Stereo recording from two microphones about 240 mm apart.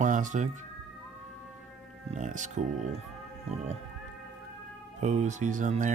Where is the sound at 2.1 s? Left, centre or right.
Right.